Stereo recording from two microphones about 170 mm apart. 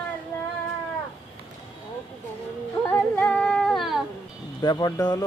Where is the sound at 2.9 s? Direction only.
10° left (ahead or behind).